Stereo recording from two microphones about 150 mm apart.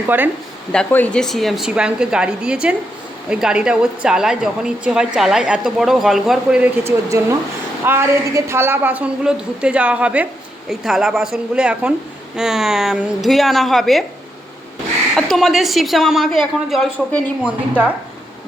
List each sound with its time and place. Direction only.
0.1 s a woman's voice: 15° right (ahead or behind)
0.7 s a woman's voice: 10° left (ahead or behind)
6.8 s a woman's voice: 20° right (ahead or behind); by 14.0 s centre (ahead or behind)
15.1 s a woman's voice: centre (ahead or behind)